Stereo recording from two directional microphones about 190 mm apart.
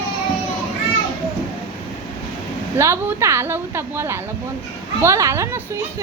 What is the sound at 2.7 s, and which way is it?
Speech, 15° right (ahead or behind).